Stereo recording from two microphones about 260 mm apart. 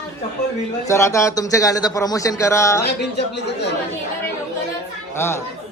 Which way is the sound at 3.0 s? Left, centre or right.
Left.